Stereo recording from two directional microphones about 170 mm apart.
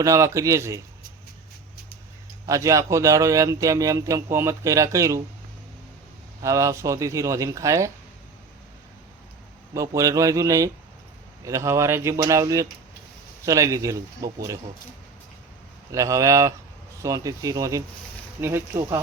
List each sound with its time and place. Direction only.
0.0 s a man's voice: 20° right (ahead or behind)
2.5 s a man's voice: 20° right (ahead or behind)
6.4 s a man's voice: 20° right (ahead or behind)
9.7 s a man's voice: 20° right (ahead or behind)
15.9 s a man's voice: 20° right (ahead or behind)